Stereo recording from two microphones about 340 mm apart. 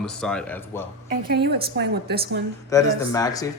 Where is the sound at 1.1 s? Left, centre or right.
Right.